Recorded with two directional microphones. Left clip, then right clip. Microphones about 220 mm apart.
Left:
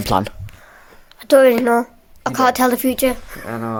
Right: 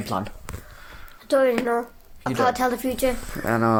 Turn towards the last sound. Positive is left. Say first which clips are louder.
# right 4 dB
turn(degrees=-35)  # may be behind; listen again after turning